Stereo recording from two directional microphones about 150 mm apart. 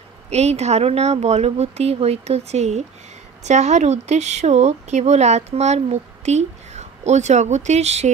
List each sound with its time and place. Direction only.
0.3 s speech: 45° right (ahead or behind)